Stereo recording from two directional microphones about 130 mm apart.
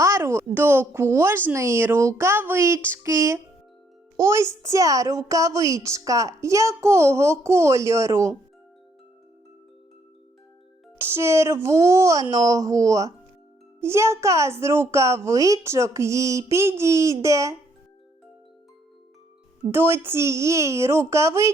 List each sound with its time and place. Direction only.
0.0 s a woman's voice: 20° right (ahead or behind)
10.9 s a woman's voice: 20° right (ahead or behind)
19.7 s a woman's voice: 20° right (ahead or behind)